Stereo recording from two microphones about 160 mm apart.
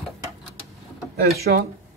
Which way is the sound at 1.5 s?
90° right.